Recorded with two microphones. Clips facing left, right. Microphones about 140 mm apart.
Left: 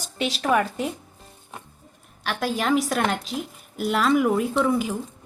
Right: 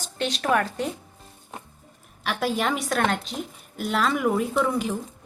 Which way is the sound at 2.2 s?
Centre (ahead or behind).